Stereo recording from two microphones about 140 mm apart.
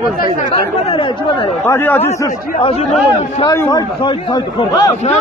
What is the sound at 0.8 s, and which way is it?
Speech, 40° left (ahead or behind).